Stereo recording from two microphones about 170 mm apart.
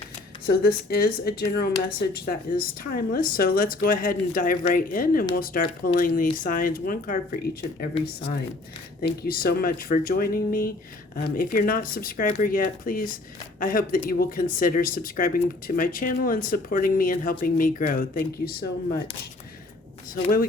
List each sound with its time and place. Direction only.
0.4 s speech: 65° left (ahead or behind)
9.0 s speech: 60° left (ahead or behind)